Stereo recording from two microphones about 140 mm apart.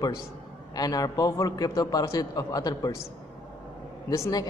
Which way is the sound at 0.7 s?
25° left (ahead or behind).